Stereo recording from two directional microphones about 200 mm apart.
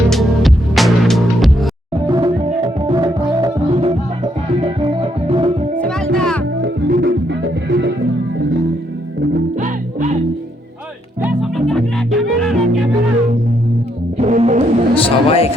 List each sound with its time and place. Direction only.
0.1 s music: centre (ahead or behind)
2.0 s music: 20° right (ahead or behind)
6.1 s music: 5° left (ahead or behind)
6.9 s music: 55° right (ahead or behind)
9.6 s music: 40° right (ahead or behind)
11.2 s music: 5° right (ahead or behind)
14.2 s music: 35° right (ahead or behind)
14.9 s a sound: 30° left (ahead or behind)